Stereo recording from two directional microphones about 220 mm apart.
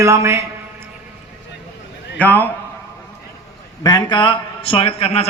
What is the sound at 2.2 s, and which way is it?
Speech, 5° left (ahead or behind).